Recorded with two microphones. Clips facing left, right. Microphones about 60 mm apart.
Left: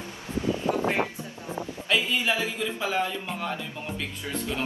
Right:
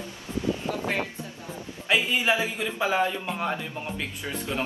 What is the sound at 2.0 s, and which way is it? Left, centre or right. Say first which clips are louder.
Speech: right 2 dB; centre.